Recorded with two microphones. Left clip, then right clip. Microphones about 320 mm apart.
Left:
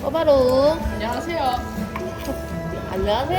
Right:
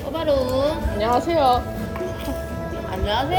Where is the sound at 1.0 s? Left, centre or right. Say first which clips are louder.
Right 5 dB; centre.